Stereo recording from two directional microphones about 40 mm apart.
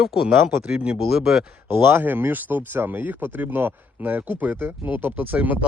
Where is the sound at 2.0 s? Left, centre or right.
Right.